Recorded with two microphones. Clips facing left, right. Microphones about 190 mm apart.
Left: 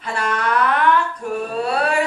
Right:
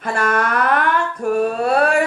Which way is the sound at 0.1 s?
50° right (ahead or behind).